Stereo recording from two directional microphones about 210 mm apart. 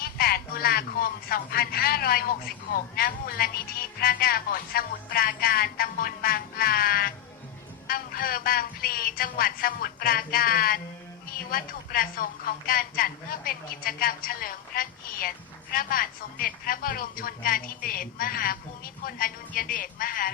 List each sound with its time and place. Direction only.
0.0 s speech: 45° left (ahead or behind)